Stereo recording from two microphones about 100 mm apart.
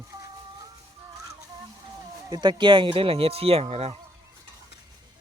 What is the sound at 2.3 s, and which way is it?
Speech, 50° right (ahead or behind).